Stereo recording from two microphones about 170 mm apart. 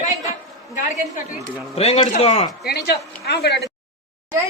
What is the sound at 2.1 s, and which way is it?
Speech, 40° left (ahead or behind).